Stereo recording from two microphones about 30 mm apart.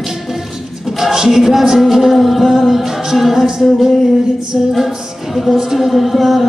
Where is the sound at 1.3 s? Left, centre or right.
Centre.